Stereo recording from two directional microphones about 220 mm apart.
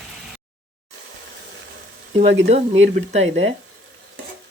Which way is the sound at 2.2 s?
30° right (ahead or behind).